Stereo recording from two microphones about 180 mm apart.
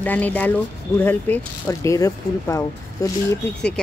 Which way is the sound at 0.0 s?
10° left (ahead or behind).